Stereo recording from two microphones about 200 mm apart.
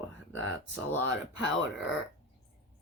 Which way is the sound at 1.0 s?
70° left (ahead or behind).